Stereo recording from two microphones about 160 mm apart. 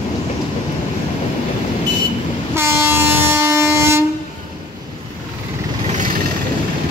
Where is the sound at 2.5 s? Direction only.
15° right (ahead or behind).